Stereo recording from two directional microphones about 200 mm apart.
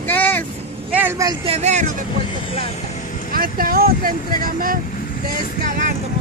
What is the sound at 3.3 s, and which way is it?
Speech, 45° right (ahead or behind).